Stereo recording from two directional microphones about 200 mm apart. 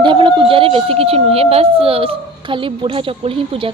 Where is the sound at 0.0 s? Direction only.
25° right (ahead or behind).